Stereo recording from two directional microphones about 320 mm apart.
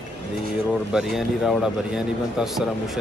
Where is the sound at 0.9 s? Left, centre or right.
Centre.